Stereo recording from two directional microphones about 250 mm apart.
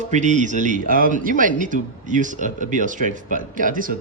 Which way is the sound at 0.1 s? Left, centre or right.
Right.